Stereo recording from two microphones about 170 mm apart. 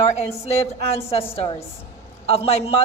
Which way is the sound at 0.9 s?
35° left (ahead or behind).